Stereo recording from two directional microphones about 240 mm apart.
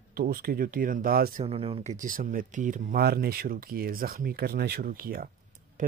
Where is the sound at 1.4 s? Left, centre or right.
Right.